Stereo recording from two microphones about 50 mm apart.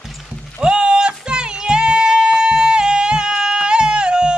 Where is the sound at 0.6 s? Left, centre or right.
Centre.